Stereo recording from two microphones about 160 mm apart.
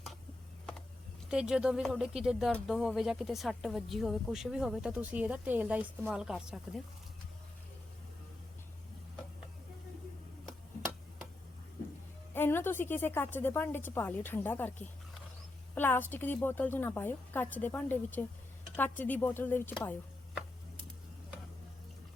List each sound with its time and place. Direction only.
1.3 s speech: 5° right (ahead or behind)
12.3 s a woman's voice: 15° left (ahead or behind)